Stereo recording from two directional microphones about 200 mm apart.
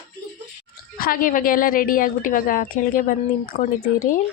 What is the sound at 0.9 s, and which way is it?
Speech, 45° left (ahead or behind).